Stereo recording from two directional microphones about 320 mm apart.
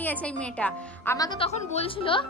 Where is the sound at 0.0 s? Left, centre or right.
Centre.